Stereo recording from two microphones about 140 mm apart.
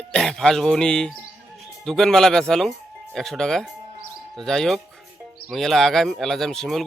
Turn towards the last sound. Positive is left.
turn(degrees=0)  # may be behind; listen again after turning